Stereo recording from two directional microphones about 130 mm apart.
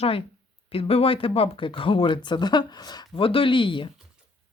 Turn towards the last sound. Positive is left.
turn(degrees=40)  # may be behind; listen again after turning